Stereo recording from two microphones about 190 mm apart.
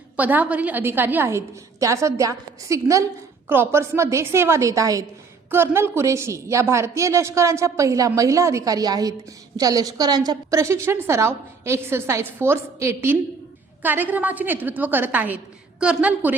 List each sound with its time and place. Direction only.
0.2 s a woman's voice: 10° right (ahead or behind)